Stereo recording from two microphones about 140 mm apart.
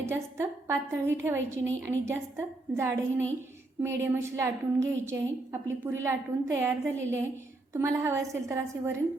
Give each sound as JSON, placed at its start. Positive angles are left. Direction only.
{"t": 0.0, "sound": "a woman's voice", "side_deg": -20}